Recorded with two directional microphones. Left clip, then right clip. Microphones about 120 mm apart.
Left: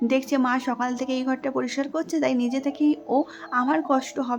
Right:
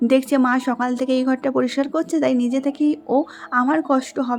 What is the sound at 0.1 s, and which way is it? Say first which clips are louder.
Speech: right 6 dB; 45° right (ahead or behind).